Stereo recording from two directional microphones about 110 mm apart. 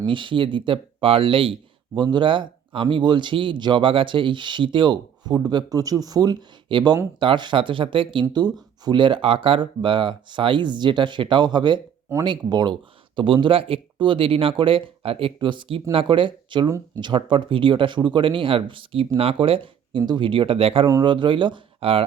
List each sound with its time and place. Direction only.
0.1 s speech: 50° right (ahead or behind)
8.3 s speech: 40° right (ahead or behind)
16.6 s speech: 25° right (ahead or behind)
17.0 s speech: 45° right (ahead or behind)
21.0 s speech: 45° right (ahead or behind)